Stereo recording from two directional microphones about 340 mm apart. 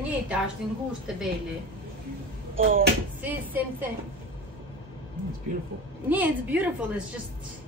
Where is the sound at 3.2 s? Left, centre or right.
Centre.